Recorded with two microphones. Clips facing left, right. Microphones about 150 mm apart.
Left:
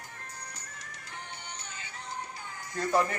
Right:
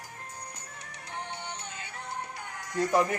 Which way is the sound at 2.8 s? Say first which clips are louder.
Right 2 dB; 15° right (ahead or behind).